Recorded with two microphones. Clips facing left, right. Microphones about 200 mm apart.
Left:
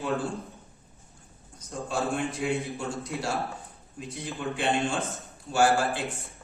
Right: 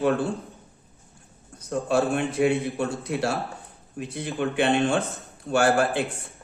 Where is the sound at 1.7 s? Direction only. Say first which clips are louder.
Right 7 dB; 70° right (ahead or behind).